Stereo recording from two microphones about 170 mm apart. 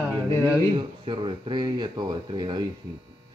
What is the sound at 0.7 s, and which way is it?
Speech, 30° right (ahead or behind).